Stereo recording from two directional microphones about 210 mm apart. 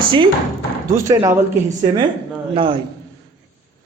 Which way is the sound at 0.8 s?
15° right (ahead or behind).